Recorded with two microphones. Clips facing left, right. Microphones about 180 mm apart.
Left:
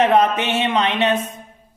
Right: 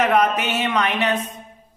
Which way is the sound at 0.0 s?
25° left (ahead or behind).